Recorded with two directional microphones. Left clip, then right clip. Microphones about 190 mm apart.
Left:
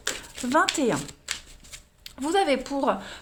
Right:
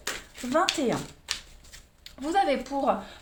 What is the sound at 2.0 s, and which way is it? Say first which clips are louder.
Speech: left 1 dB; 40° left (ahead or behind).